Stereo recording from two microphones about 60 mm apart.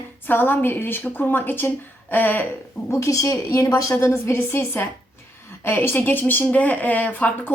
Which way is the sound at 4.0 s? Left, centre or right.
Left.